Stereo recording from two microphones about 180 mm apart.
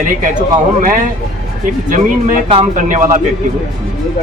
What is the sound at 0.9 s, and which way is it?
Speech, 45° right (ahead or behind).